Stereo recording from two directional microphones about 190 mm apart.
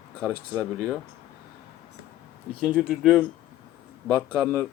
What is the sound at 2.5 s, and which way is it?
Speech, centre (ahead or behind).